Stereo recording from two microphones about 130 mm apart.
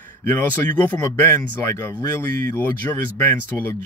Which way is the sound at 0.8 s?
20° left (ahead or behind).